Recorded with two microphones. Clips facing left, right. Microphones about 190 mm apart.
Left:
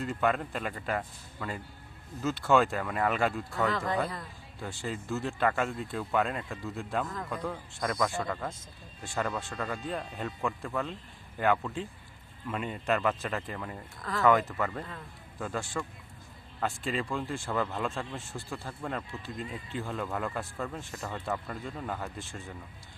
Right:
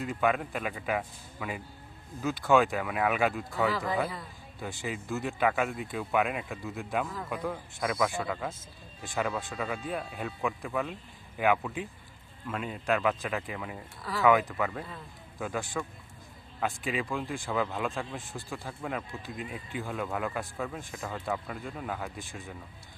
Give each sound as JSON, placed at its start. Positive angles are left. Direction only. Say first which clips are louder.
{"t": 0.0, "sound": "speech", "louder": "right 1 dB", "side_deg": -5}
{"t": 4.7, "sound": "speech", "louder": "even", "side_deg": -15}
{"t": 17.0, "sound": "speech", "louder": "right 1 dB", "side_deg": 0}
{"t": 17.2, "sound": "speech", "louder": "even", "side_deg": -15}
{"t": 17.5, "sound": "speech", "louder": "right 1 dB", "side_deg": -5}
{"t": 18.2, "sound": "speech", "louder": "even", "side_deg": -15}
{"t": 22.2, "sound": "speech", "louder": "even", "side_deg": -15}